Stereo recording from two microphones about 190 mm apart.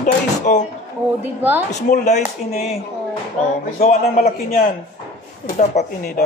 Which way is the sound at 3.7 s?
35° left (ahead or behind).